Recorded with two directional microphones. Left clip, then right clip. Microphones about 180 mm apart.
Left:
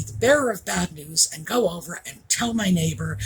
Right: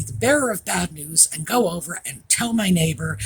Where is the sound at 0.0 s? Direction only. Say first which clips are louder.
Even; 55° right (ahead or behind).